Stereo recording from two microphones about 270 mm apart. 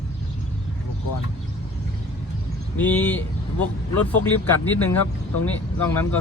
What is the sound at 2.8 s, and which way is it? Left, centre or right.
Speech, centre.